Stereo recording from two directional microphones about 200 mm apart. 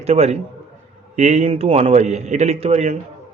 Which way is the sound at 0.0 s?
30° right (ahead or behind).